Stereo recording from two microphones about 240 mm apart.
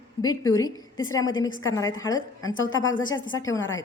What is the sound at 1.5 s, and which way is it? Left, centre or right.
Speech, left.